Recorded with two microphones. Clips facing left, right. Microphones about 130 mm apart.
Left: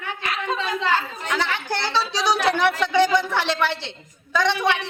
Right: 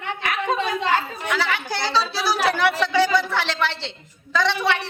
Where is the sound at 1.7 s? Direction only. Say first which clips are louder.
Right 1 dB; 15° right (ahead or behind).